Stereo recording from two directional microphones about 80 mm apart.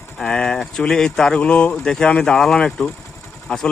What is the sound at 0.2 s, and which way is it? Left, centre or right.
Speech, centre.